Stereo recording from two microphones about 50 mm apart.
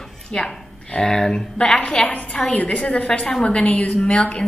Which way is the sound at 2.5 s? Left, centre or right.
Left.